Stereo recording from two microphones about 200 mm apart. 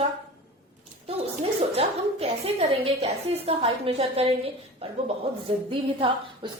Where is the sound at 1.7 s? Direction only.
30° right (ahead or behind).